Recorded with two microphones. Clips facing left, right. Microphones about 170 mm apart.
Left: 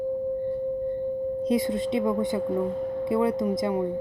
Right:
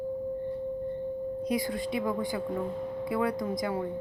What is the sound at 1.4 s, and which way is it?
Speech, 25° left (ahead or behind).